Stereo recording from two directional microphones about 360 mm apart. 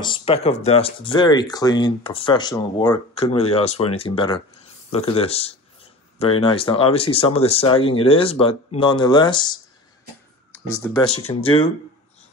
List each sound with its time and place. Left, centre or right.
0.0 s speech: centre
10.7 s speech: centre